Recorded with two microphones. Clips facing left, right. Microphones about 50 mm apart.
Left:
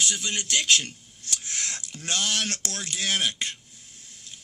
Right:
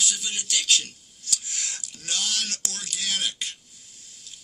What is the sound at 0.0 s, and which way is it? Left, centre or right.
A man's voice, left.